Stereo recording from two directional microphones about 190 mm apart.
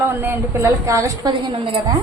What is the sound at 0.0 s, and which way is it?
A woman's voice, 10° right (ahead or behind).